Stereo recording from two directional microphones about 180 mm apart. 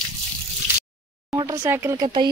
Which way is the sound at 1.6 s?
15° right (ahead or behind).